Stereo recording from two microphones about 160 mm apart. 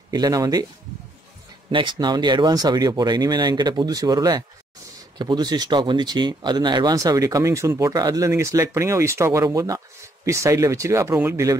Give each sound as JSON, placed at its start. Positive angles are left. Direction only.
{"t": 0.1, "sound": "speech", "side_deg": -25}
{"t": 1.7, "sound": "speech", "side_deg": -30}